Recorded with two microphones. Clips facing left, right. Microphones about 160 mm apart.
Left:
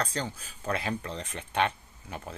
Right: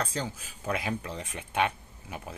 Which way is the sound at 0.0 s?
10° right (ahead or behind).